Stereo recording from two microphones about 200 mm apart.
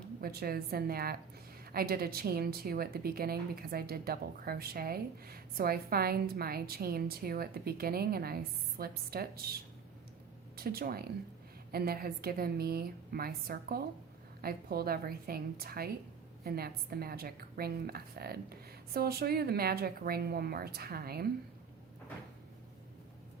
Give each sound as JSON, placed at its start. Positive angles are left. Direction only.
{"t": 0.2, "sound": "a woman's voice", "side_deg": -50}
{"t": 10.6, "sound": "a woman's voice", "side_deg": -50}